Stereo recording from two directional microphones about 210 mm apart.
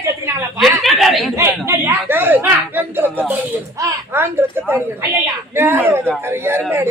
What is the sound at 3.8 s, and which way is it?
Speech, 10° right (ahead or behind).